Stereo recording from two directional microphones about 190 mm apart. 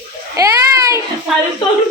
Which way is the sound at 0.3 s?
15° right (ahead or behind).